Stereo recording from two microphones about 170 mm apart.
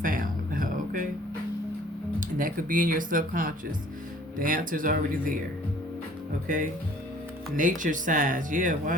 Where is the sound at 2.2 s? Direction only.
50° right (ahead or behind).